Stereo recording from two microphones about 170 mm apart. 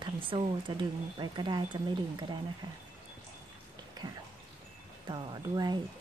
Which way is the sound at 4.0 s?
25° right (ahead or behind).